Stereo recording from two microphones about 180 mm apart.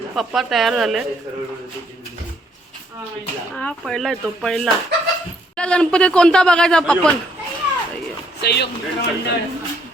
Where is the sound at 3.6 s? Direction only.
5° left (ahead or behind).